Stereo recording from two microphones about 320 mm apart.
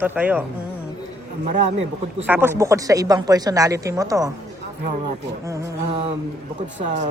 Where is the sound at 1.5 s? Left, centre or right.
Right.